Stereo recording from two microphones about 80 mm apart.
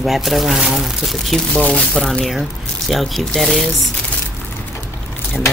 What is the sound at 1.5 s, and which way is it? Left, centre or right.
Speech, centre.